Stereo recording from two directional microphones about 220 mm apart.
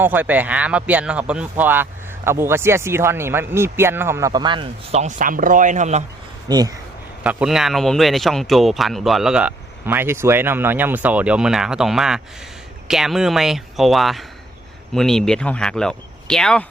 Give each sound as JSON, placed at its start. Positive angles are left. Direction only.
{"t": 0.0, "sound": "speech", "side_deg": -10}
{"t": 6.5, "sound": "speech", "side_deg": -15}
{"t": 7.3, "sound": "speech", "side_deg": -5}